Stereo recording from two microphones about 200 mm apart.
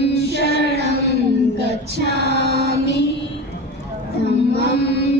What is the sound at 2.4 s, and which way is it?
Mantra, 55° right (ahead or behind).